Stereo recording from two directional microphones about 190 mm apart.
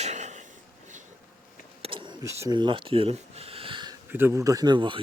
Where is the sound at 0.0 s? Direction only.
35° right (ahead or behind).